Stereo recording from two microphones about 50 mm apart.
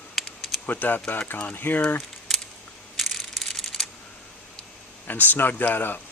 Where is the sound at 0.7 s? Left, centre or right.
Left.